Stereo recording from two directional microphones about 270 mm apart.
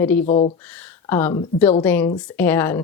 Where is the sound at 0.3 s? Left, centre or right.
Left.